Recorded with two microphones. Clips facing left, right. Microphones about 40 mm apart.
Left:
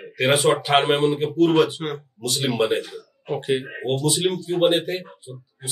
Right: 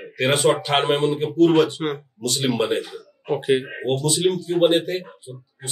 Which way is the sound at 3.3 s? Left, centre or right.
Right.